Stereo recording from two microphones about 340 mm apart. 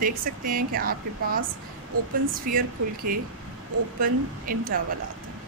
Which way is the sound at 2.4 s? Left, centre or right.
Right.